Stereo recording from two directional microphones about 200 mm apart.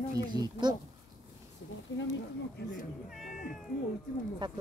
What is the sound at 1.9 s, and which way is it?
Speech, 75° left (ahead or behind).